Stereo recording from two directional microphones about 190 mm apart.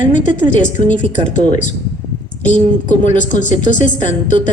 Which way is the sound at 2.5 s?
40° left (ahead or behind).